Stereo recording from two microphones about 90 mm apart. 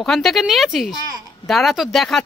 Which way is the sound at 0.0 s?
Centre (ahead or behind).